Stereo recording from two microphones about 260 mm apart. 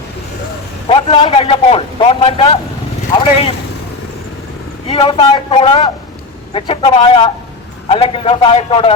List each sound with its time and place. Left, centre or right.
0.9 s a man's voice: centre
4.9 s a man's voice: centre